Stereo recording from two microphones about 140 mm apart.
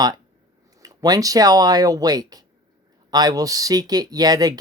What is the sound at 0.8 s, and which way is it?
Speech, 25° right (ahead or behind).